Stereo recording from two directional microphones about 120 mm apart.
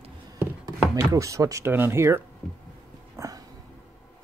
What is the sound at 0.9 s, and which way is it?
Speech, 25° right (ahead or behind).